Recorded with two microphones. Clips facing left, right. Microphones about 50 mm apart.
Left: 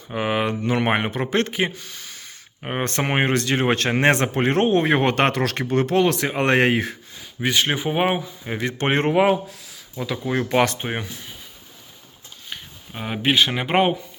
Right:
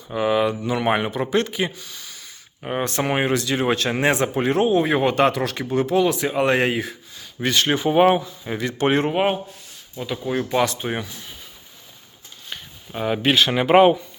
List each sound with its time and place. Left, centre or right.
0.1 s a man's voice: left
7.4 s speech: centre
8.5 s speech: left
10.0 s speech: left
10.8 s speech: left
12.5 s speech: centre